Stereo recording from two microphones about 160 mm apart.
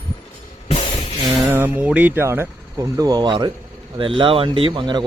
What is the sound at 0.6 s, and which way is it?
Music, 40° left (ahead or behind).